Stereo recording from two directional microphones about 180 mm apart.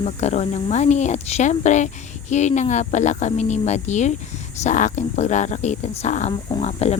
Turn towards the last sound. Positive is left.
turn(degrees=35)  # may be behind; listen again after turning